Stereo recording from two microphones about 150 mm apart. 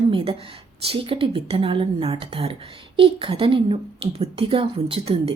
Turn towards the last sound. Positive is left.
turn(degrees=-40)  # may be behind; listen again after turning